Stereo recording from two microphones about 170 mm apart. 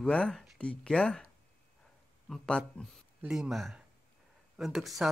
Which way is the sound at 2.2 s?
5° left (ahead or behind).